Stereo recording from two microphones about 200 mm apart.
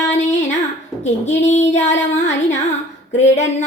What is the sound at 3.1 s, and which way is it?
Speech, 35° left (ahead or behind).